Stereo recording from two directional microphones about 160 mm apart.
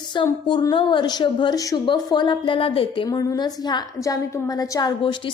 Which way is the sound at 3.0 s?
20° left (ahead or behind).